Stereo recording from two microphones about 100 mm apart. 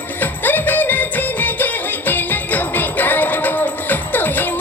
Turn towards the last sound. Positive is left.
turn(degrees=20)  # may be behind; listen again after turning